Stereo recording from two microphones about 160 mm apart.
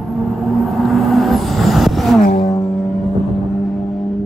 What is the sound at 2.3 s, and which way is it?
Music, 40° left (ahead or behind).